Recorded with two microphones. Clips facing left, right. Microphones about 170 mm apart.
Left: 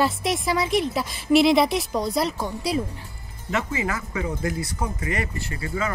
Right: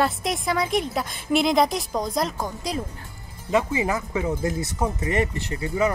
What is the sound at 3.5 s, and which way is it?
Speech, 15° right (ahead or behind).